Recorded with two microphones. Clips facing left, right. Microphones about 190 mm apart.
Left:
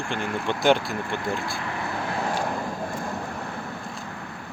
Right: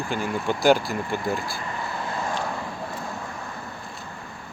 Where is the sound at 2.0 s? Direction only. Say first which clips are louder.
Left 2 dB; 65° left (ahead or behind).